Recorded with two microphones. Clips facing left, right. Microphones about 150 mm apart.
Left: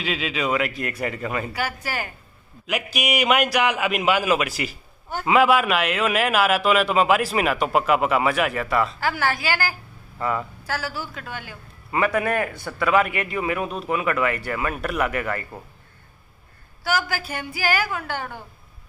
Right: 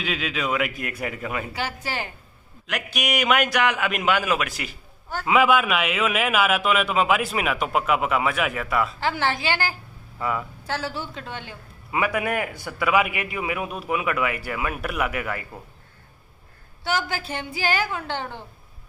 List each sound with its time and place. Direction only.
0.0 s a man's voice: centre (ahead or behind)
1.5 s a woman's voice: 20° right (ahead or behind)
2.6 s a man's voice: 5° left (ahead or behind)
9.0 s a woman's voice: 25° right (ahead or behind)
10.1 s speech: 5° right (ahead or behind)
10.7 s a woman's voice: 25° right (ahead or behind)
11.9 s a man's voice: 10° right (ahead or behind)
16.8 s a woman's voice: 25° right (ahead or behind)